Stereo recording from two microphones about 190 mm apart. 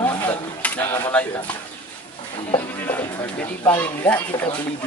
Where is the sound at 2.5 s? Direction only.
10° left (ahead or behind).